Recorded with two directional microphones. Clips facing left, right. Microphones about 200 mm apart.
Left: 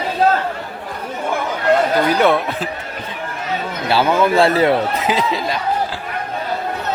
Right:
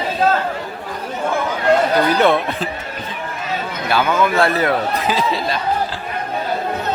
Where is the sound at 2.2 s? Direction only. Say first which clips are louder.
Even; 10° left (ahead or behind).